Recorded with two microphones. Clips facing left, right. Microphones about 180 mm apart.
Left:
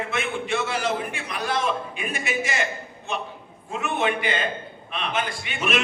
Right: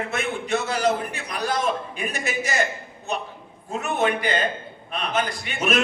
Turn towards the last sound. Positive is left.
turn(degrees=-40)  # may be behind; listen again after turning